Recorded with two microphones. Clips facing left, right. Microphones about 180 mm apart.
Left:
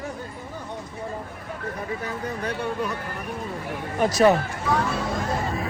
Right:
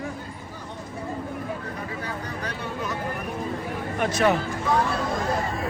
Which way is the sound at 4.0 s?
40° left (ahead or behind).